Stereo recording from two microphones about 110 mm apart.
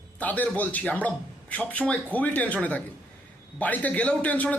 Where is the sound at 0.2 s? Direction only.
15° left (ahead or behind).